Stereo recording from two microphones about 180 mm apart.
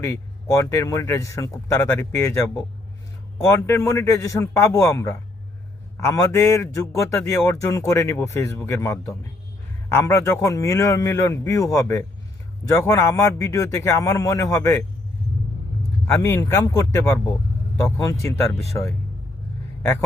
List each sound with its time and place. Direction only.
0.0 s a man's voice: 15° left (ahead or behind)
3.7 s a man's voice: 15° left (ahead or behind)
16.2 s a man's voice: 15° left (ahead or behind)